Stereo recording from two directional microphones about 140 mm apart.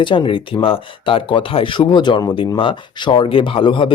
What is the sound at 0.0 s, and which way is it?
Speech, 35° left (ahead or behind).